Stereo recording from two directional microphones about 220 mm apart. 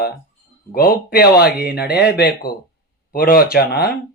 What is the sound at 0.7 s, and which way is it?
Speech, 40° left (ahead or behind).